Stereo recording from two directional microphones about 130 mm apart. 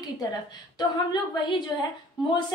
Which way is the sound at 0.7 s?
30° left (ahead or behind).